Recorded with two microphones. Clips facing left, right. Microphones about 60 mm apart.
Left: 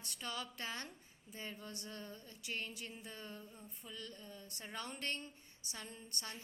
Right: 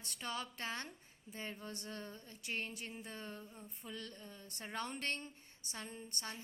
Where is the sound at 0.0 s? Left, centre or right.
Right.